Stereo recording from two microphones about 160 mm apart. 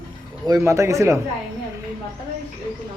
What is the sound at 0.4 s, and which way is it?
Speech, 20° right (ahead or behind).